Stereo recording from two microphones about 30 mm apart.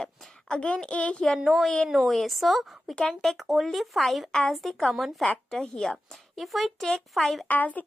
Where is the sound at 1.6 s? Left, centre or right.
Left.